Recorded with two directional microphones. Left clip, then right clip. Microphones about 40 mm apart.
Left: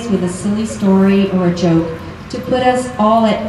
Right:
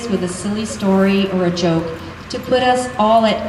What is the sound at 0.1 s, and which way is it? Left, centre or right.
A woman's voice, centre.